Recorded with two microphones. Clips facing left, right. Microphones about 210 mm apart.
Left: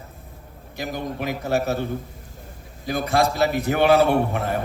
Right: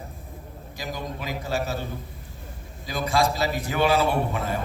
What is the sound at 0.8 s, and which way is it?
A man's voice, 60° left (ahead or behind).